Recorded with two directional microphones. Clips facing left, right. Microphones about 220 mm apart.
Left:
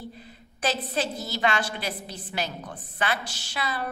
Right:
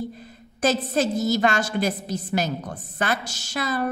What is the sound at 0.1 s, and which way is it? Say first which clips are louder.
A woman's voice: right 4 dB; 45° right (ahead or behind).